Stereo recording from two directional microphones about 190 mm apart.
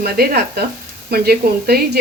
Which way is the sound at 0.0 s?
55° right (ahead or behind).